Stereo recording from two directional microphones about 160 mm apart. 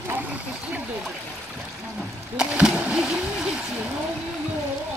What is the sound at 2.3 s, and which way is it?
Speech, 5° right (ahead or behind).